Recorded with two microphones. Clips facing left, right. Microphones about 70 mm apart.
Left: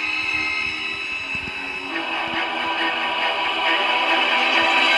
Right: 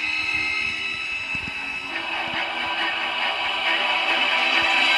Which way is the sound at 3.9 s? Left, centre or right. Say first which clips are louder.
Left 3 dB; left.